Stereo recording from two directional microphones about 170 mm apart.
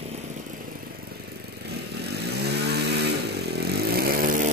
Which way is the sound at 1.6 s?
75° right (ahead or behind).